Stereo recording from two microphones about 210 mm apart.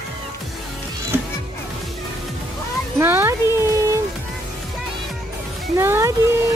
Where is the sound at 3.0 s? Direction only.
10° right (ahead or behind).